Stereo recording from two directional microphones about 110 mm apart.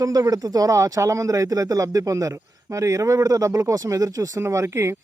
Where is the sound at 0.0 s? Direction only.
35° right (ahead or behind).